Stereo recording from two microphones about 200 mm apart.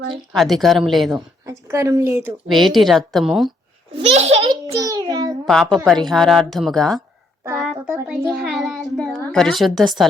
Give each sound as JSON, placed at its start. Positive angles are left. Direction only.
{"t": 0.1, "sound": "a woman's voice", "side_deg": 0}
{"t": 1.5, "sound": "a woman's voice", "side_deg": -15}
{"t": 3.9, "sound": "laughter", "side_deg": -30}
{"t": 4.7, "sound": "a sound", "side_deg": -15}
{"t": 5.5, "sound": "a woman's voice", "side_deg": 0}
{"t": 7.9, "sound": "a child's voice", "side_deg": -10}
{"t": 8.4, "sound": "a sound", "side_deg": 0}